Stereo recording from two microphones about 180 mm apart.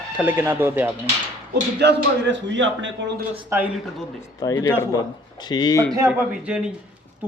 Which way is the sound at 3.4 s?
10° right (ahead or behind).